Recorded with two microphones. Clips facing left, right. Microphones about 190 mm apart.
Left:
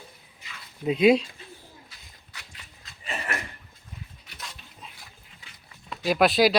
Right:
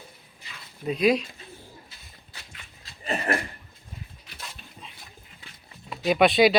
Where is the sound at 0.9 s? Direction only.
25° left (ahead or behind).